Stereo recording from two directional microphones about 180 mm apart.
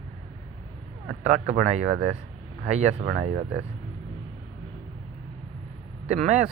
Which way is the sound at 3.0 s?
55° right (ahead or behind).